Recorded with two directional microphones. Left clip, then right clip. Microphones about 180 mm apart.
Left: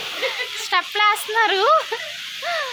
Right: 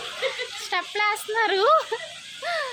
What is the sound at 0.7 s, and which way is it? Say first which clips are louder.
Speech: left 6 dB; 10° right (ahead or behind).